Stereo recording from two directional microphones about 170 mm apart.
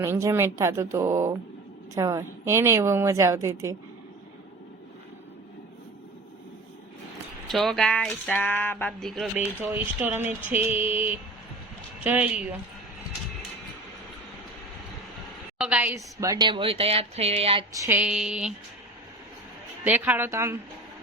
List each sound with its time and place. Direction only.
0.0 s a woman's voice: 15° right (ahead or behind)
7.4 s speech: centre (ahead or behind)
9.6 s a woman's voice: 10° right (ahead or behind)
12.0 s a woman's voice: 10° right (ahead or behind)
15.5 s speech: 5° right (ahead or behind); by 17.7 s 35° right (ahead or behind)
17.7 s a woman's voice: 15° right (ahead or behind)
19.8 s a woman's voice: 10° right (ahead or behind)